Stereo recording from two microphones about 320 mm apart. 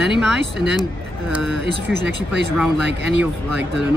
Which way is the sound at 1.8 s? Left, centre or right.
Centre.